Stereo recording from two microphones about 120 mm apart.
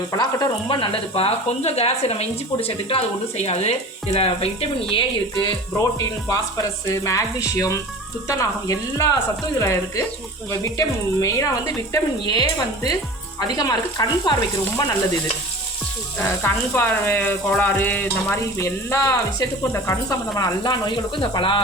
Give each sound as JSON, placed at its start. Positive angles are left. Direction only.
{"t": 0.1, "sound": "speech", "side_deg": 30}
{"t": 5.4, "sound": "speech", "side_deg": 30}
{"t": 16.2, "sound": "speech", "side_deg": 20}